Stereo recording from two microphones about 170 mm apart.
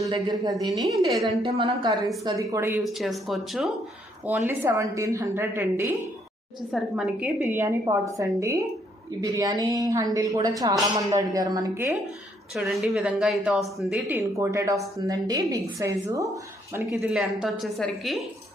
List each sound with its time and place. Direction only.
0.0 s a woman's voice: 25° right (ahead or behind)
1.1 s a woman's voice: centre (ahead or behind)
1.4 s a woman's voice: 30° right (ahead or behind)
2.8 s a woman's voice: centre (ahead or behind)
4.3 s a woman's voice: 10° right (ahead or behind)
6.7 s a woman's voice: 5° right (ahead or behind)
12.5 s a woman's voice: centre (ahead or behind)
13.9 s a woman's voice: 10° right (ahead or behind)